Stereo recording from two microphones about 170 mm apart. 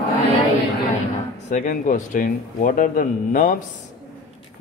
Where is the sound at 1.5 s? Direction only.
45° left (ahead or behind).